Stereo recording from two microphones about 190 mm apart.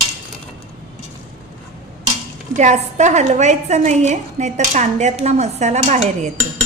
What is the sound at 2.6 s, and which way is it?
A woman's voice, 40° right (ahead or behind).